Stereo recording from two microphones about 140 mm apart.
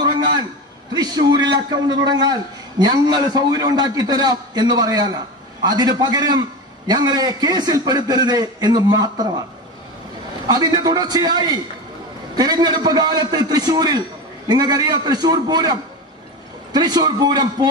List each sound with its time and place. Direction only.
0.9 s a man's voice: 30° right (ahead or behind)
10.4 s a man's voice: 30° right (ahead or behind)